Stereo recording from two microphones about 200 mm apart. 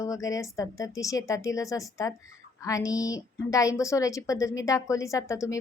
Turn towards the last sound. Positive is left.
turn(degrees=15)  # may be behind; listen again after turning